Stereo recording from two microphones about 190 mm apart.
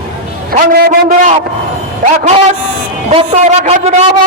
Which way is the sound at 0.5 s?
50° right (ahead or behind).